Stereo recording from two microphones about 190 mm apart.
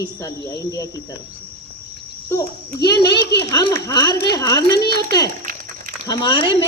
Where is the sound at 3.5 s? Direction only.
15° left (ahead or behind).